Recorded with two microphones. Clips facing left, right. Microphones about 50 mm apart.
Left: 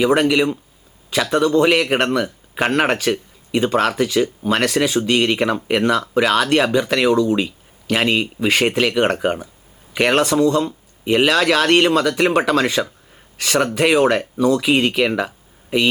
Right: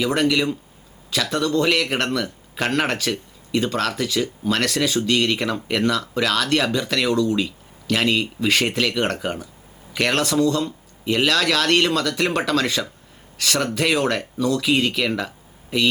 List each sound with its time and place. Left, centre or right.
0.0 s speech: centre